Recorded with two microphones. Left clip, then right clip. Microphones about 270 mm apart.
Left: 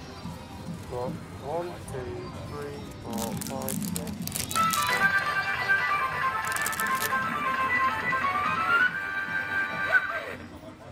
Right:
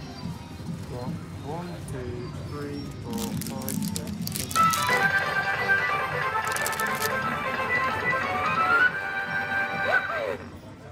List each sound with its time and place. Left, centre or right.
3.9 s music: centre
4.8 s music: centre